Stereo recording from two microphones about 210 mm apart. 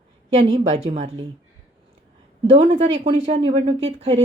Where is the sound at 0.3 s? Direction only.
20° right (ahead or behind).